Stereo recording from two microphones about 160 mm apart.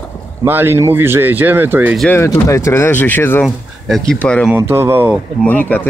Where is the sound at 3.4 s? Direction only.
Centre (ahead or behind).